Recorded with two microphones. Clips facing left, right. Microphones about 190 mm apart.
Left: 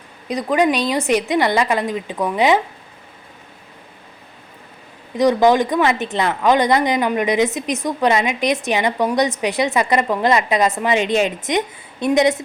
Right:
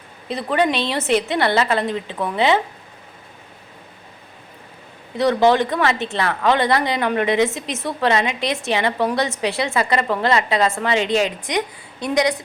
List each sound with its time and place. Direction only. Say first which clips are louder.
0.3 s speech: left 3 dB; 10° left (ahead or behind)
5.1 s speech: left 2 dB; 15° left (ahead or behind)